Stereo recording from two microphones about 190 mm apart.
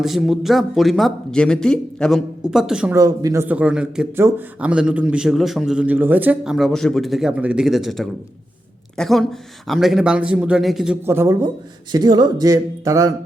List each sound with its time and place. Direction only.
0.0 s a man's voice: centre (ahead or behind)
2.9 s speech: 20° right (ahead or behind)
3.5 s a man's voice: 5° right (ahead or behind)
11.0 s speech: 10° right (ahead or behind)